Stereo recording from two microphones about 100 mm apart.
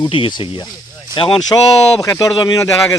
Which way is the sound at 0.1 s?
55° left (ahead or behind).